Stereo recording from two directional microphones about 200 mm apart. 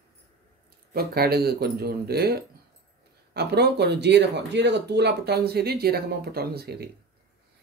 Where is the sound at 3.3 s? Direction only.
55° right (ahead or behind).